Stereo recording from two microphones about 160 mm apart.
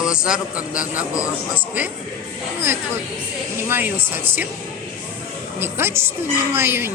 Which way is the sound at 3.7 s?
15° right (ahead or behind).